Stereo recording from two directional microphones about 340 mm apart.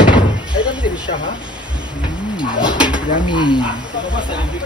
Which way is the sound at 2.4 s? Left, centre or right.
Centre.